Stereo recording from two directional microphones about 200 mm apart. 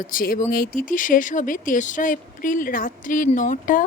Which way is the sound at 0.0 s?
45° left (ahead or behind).